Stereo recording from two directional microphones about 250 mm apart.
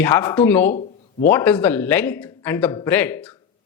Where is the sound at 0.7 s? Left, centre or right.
Left.